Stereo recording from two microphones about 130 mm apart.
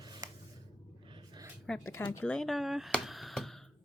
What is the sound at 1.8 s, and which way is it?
Speech, 20° left (ahead or behind).